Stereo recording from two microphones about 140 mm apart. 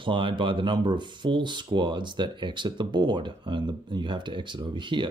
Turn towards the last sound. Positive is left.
turn(degrees=-35)  # may be behind; listen again after turning